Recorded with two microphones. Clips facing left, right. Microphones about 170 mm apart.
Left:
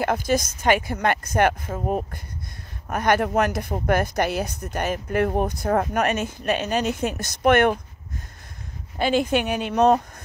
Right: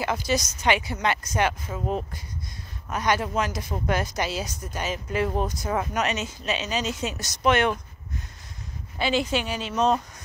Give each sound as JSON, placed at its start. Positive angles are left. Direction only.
{"t": 0.0, "sound": "speech", "side_deg": 50}
{"t": 8.9, "sound": "speech", "side_deg": 50}